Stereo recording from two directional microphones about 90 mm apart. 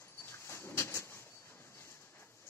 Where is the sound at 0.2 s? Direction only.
25° left (ahead or behind).